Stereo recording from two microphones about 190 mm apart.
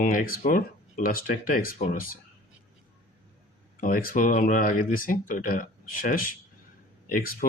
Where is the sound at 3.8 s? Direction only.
45° left (ahead or behind).